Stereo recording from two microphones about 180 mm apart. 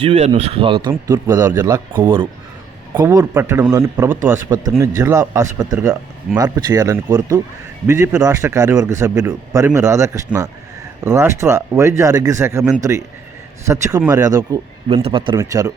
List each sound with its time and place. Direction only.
0.0 s speech: 35° right (ahead or behind)
0.9 s a man's voice: 20° right (ahead or behind)
13.7 s a man's voice: 15° right (ahead or behind)
14.8 s speech: 30° right (ahead or behind)
15.4 s speech: 20° right (ahead or behind)